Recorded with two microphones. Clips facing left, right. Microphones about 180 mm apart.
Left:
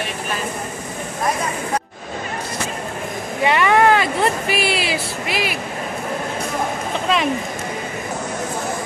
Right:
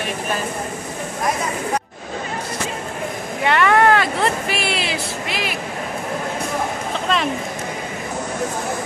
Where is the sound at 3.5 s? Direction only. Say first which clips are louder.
Even; 5° left (ahead or behind).